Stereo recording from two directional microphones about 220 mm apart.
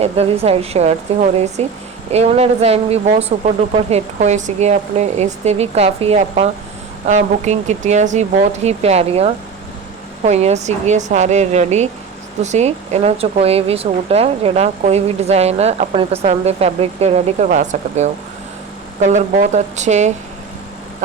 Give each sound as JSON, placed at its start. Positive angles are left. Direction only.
{"t": 0.0, "sound": "speech", "side_deg": -30}
{"t": 19.1, "sound": "speech", "side_deg": -30}